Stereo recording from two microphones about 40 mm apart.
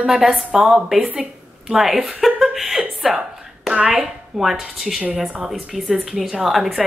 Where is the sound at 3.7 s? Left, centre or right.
Right.